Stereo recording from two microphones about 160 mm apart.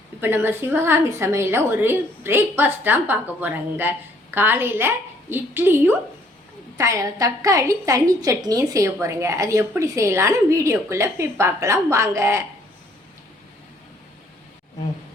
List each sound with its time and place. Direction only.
0.2 s a woman's voice: 15° right (ahead or behind)